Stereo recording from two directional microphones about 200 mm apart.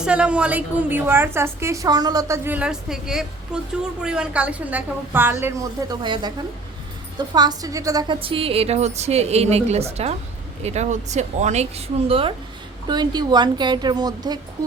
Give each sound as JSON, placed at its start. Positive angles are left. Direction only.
{"t": 0.0, "sound": "a woman's voice", "side_deg": -5}